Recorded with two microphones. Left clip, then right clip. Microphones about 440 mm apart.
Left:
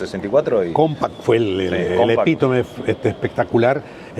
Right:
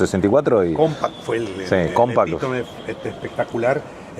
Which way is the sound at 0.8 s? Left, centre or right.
Left.